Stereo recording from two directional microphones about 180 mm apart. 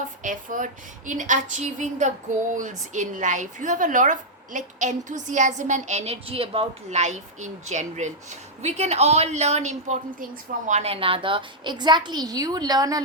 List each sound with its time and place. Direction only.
0.2 s a woman's voice: 45° right (ahead or behind); by 13.0 s 20° right (ahead or behind)